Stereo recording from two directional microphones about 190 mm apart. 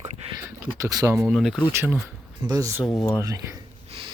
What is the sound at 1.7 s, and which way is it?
Speech, 10° right (ahead or behind).